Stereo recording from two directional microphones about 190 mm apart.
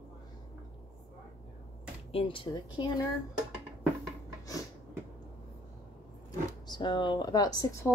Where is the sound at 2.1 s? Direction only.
25° left (ahead or behind).